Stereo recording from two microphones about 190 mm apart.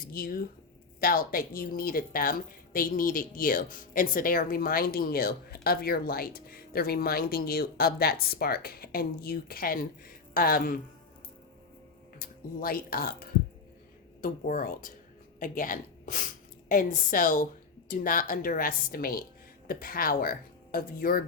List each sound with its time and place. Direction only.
0.1 s speech: 50° left (ahead or behind)
12.2 s speech: 50° left (ahead or behind)
14.2 s a woman's voice: 45° left (ahead or behind)